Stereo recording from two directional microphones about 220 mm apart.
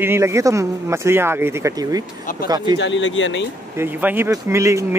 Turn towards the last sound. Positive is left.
turn(degrees=-15)  # may be behind; listen again after turning